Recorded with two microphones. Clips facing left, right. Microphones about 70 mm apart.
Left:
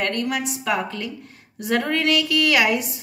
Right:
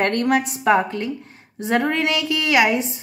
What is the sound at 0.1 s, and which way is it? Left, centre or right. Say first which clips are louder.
A woman's voice: right 5 dB; right.